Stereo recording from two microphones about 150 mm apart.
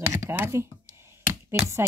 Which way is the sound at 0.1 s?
20° right (ahead or behind).